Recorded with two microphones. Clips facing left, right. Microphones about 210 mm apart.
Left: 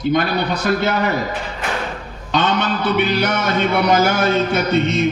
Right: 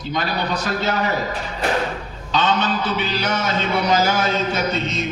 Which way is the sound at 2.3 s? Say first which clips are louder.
Left 2 dB; 60° left (ahead or behind).